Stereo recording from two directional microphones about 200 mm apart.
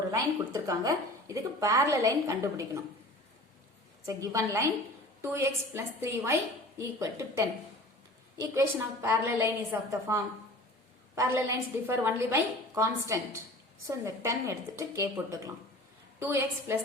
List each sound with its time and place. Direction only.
0.1 s a woman's voice: 15° right (ahead or behind)
4.0 s a woman's voice: 15° right (ahead or behind)